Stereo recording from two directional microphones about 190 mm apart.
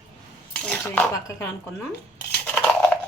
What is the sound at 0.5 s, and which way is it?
Cutlery, 5° left (ahead or behind).